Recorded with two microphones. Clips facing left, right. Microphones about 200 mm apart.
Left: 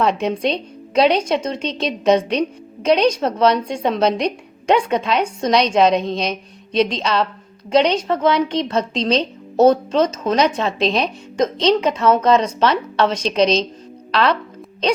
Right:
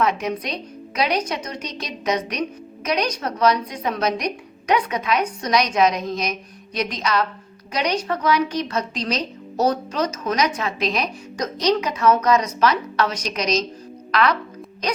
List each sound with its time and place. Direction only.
0.0 s a woman's voice: 30° left (ahead or behind)